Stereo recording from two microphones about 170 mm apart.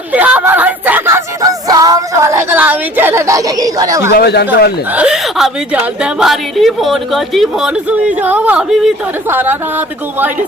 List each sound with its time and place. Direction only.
0.1 s a sound: 10° right (ahead or behind)
4.2 s speech: 70° left (ahead or behind)
4.9 s a woman's voice: 5° right (ahead or behind)